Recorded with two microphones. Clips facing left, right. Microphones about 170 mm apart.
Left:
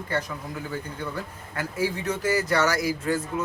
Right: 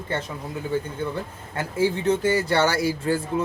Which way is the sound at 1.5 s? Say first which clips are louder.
Right 4 dB; 25° right (ahead or behind).